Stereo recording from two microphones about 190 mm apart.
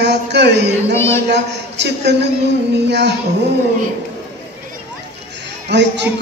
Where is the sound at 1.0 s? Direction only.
15° left (ahead or behind).